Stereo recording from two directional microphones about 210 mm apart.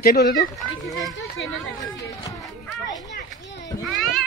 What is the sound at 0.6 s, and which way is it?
Speech, centre (ahead or behind).